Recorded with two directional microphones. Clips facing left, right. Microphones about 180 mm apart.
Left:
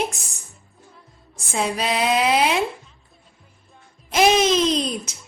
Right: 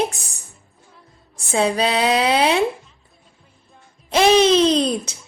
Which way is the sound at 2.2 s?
30° right (ahead or behind).